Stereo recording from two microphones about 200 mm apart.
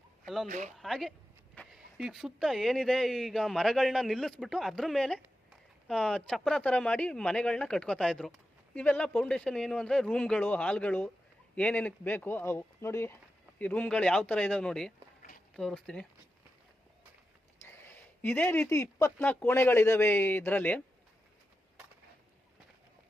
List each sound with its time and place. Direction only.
0.4 s speech: 40° right (ahead or behind)
0.8 s speech: centre (ahead or behind)
17.6 s speech: 10° left (ahead or behind)